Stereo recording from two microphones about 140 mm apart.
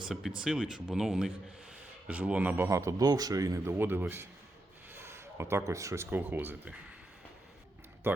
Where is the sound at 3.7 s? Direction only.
15° right (ahead or behind).